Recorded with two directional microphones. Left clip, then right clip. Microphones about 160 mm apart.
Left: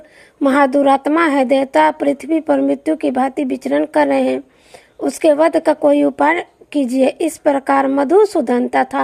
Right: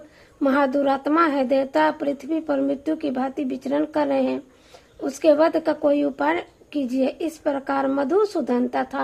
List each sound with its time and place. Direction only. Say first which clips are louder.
0.4 s speech: left 7 dB; 30° left (ahead or behind)